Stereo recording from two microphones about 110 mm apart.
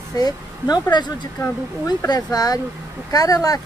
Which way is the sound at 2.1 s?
35° left (ahead or behind).